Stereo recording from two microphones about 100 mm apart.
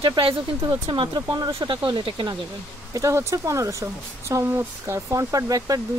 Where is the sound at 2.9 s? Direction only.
30° right (ahead or behind).